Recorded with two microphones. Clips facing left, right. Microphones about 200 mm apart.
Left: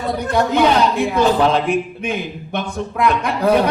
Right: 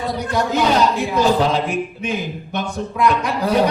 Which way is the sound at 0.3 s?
55° left (ahead or behind).